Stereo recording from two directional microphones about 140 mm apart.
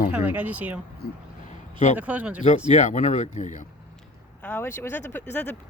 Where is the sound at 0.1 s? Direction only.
10° right (ahead or behind).